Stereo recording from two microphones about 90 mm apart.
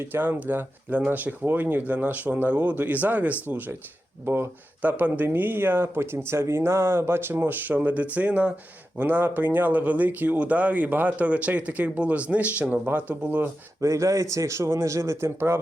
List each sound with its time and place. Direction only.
0.0 s speech: 20° right (ahead or behind)
13.8 s speech: 35° right (ahead or behind)